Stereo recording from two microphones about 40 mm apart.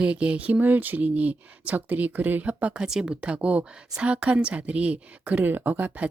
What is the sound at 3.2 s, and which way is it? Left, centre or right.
Speech, right.